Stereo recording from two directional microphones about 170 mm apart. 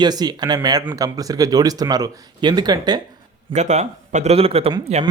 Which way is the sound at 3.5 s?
45° right (ahead or behind).